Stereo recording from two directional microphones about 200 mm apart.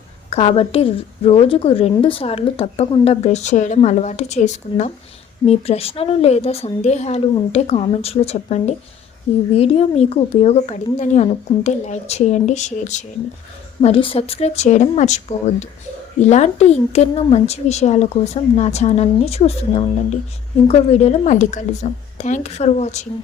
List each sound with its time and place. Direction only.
0.3 s a woman's voice: 30° left (ahead or behind)
16.2 s a woman's voice: 35° left (ahead or behind)